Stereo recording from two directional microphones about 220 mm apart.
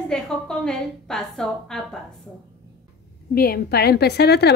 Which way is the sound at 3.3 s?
45° left (ahead or behind).